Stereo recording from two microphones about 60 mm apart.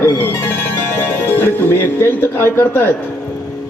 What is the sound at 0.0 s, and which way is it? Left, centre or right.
Speech, left.